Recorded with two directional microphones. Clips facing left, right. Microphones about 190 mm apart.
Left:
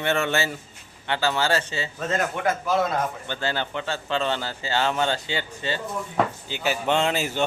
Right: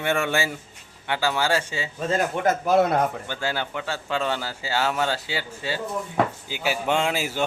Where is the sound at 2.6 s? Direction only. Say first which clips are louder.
Right 6 dB; 60° right (ahead or behind).